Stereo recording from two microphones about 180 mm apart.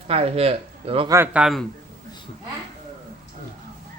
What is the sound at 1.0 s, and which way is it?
Speech, 15° right (ahead or behind).